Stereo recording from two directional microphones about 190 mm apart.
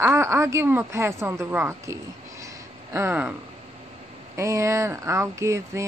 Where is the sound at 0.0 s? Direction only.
15° right (ahead or behind).